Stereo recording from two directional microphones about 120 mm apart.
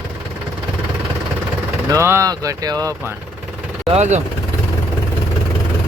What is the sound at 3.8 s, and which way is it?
Speech, 65° right (ahead or behind).